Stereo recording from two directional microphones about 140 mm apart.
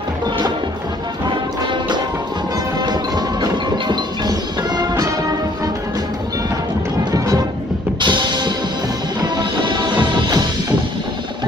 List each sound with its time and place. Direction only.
1.3 s music: 35° right (ahead or behind)
7.1 s music: 30° right (ahead or behind)